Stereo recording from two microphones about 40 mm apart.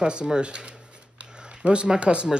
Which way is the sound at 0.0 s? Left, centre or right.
Right.